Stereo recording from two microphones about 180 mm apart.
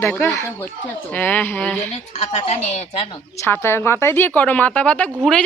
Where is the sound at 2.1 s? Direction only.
35° left (ahead or behind).